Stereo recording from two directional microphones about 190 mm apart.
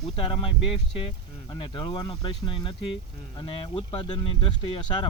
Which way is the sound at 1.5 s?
20° left (ahead or behind).